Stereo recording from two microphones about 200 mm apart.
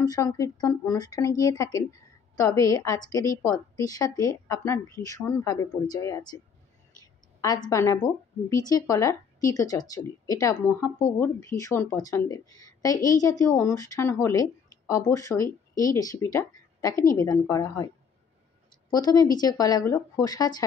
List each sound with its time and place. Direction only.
0.0 s a woman's voice: 20° left (ahead or behind)
18.9 s speech: 20° left (ahead or behind)